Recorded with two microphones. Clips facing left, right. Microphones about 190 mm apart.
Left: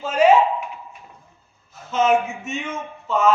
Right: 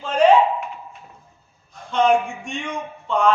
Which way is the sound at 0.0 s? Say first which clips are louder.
Even; 5° left (ahead or behind).